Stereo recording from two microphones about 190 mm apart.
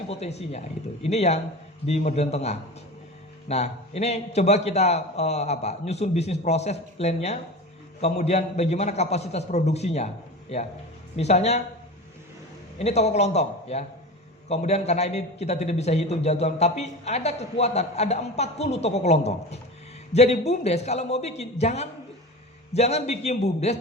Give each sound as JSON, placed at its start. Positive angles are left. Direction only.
{"t": 0.1, "sound": "a man's voice", "side_deg": 35}
{"t": 12.8, "sound": "a man's voice", "side_deg": 35}